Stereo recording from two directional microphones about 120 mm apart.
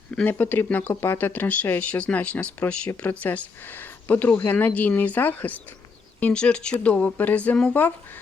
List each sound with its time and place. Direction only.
0.2 s speech: 15° left (ahead or behind)